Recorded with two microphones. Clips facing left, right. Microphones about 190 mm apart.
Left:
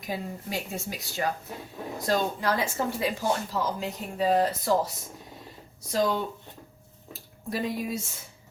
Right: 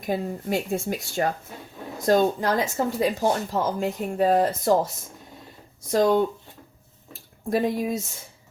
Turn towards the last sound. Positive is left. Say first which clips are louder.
# right 6 dB
turn(degrees=-50)  # may be behind; listen again after turning